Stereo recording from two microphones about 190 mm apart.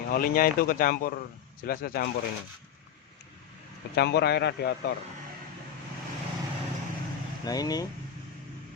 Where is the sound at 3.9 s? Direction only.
60° left (ahead or behind).